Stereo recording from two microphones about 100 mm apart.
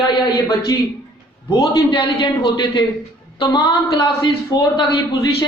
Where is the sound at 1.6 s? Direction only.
55° left (ahead or behind).